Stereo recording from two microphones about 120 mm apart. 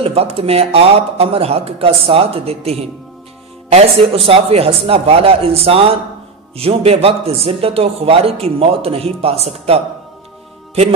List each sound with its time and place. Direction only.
0.0 s a man's voice: 55° right (ahead or behind)